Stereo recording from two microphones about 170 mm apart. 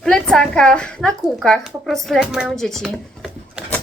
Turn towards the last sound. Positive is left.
turn(degrees=0)  # may be behind; listen again after turning